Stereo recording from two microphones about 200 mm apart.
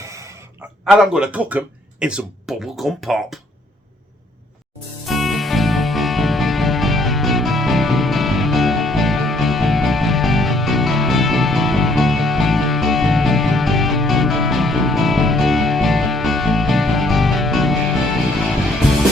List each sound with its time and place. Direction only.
0.0 s gasp: 15° right (ahead or behind)
0.9 s speech: centre (ahead or behind)
5.0 s music: centre (ahead or behind)